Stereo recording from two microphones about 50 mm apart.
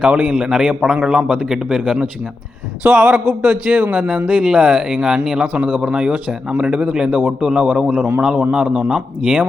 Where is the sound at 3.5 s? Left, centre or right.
Right.